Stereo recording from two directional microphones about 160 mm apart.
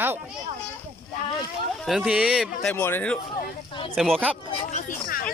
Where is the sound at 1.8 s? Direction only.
Centre (ahead or behind).